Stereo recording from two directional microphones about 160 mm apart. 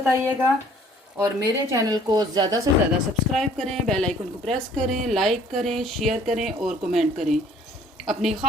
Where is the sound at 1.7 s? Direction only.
25° right (ahead or behind).